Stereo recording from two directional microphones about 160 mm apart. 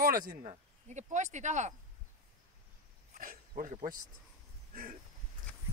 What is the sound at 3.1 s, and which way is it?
Dog, 60° right (ahead or behind).